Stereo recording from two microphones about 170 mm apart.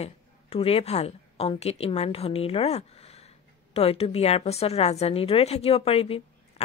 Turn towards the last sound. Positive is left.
turn(degrees=35)  # may be behind; listen again after turning